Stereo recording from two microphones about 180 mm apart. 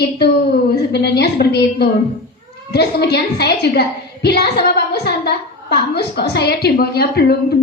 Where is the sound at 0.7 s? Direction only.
65° left (ahead or behind).